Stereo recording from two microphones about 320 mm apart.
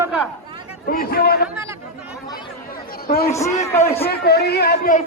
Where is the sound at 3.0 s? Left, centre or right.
Left.